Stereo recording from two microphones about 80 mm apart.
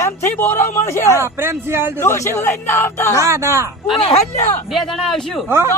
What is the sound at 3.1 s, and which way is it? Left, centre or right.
Speech, right.